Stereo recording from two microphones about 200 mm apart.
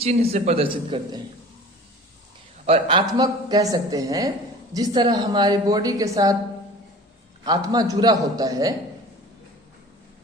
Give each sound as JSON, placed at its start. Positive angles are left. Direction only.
{"t": 0.0, "sound": "speech", "side_deg": -30}
{"t": 2.6, "sound": "speech", "side_deg": -25}
{"t": 7.4, "sound": "speech", "side_deg": -20}